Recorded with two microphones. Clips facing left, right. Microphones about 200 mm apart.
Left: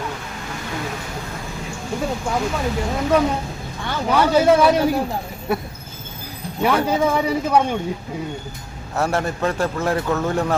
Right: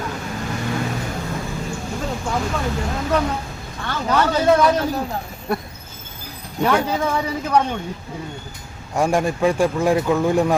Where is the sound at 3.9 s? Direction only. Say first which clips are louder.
Left 1 dB; 10° left (ahead or behind).